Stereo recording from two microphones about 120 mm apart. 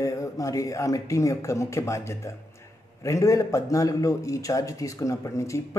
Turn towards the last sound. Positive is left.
turn(degrees=25)  # may be behind; listen again after turning